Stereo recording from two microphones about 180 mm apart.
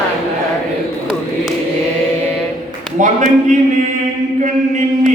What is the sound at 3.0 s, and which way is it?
Speech, 45° right (ahead or behind).